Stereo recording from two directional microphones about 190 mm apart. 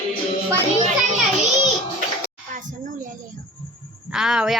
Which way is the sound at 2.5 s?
45° right (ahead or behind).